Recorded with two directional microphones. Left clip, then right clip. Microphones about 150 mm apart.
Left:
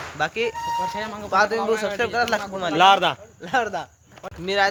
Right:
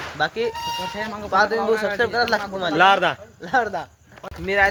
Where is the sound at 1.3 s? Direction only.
10° left (ahead or behind).